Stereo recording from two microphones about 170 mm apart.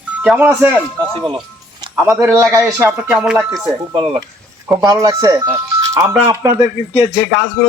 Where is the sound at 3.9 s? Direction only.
30° right (ahead or behind).